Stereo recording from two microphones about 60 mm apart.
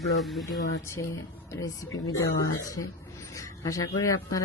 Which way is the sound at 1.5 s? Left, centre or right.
Left.